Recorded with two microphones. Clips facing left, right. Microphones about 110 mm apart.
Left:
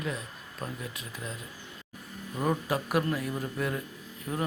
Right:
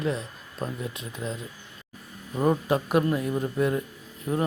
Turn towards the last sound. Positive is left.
turn(degrees=-20)  # may be behind; listen again after turning